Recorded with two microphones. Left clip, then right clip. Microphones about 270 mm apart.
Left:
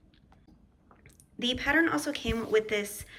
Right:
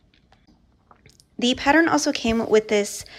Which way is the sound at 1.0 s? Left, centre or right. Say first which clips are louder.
Right 8 dB; centre.